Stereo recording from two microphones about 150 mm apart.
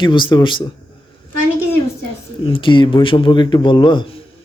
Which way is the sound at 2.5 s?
35° left (ahead or behind).